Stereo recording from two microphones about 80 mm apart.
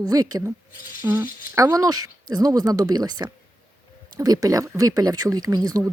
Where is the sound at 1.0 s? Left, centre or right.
Right.